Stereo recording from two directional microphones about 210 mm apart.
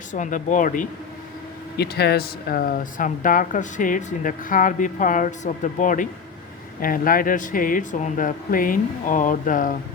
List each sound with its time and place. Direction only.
0.1 s speech: 35° left (ahead or behind)
1.7 s speech: 50° left (ahead or behind)